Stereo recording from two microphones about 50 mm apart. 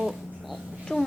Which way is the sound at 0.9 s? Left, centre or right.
Centre.